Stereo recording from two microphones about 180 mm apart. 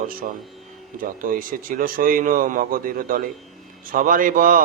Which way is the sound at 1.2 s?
50° right (ahead or behind).